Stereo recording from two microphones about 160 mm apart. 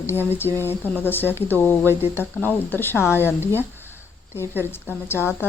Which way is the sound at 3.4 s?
15° right (ahead or behind).